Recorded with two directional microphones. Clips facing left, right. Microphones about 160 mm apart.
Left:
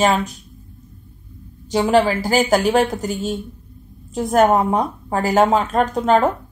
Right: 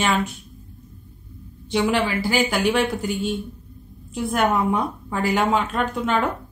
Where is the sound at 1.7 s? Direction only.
40° left (ahead or behind).